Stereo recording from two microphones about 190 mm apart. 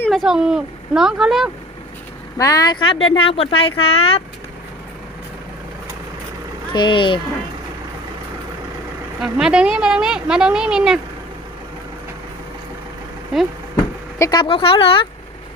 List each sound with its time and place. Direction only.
0.1 s a woman's voice: 5° right (ahead or behind)
2.4 s speech: 20° left (ahead or behind)
6.7 s speech: 25° left (ahead or behind)
9.2 s a woman's voice: 5° right (ahead or behind)
14.2 s speech: 20° left (ahead or behind)